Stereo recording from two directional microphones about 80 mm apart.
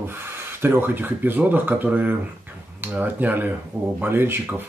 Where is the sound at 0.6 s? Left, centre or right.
Right.